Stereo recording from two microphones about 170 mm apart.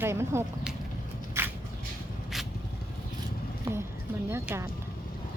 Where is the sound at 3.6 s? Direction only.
15° right (ahead or behind).